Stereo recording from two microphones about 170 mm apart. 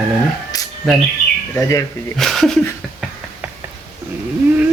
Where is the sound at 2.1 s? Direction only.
Centre (ahead or behind).